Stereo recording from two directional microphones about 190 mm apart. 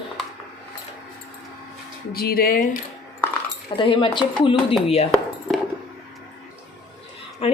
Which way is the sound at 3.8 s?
25° left (ahead or behind).